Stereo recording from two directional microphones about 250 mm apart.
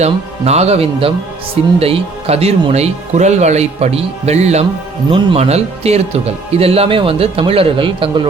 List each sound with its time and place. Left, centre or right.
0.0 s speech: right